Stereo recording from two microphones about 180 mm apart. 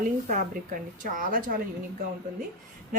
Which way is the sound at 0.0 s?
45° right (ahead or behind).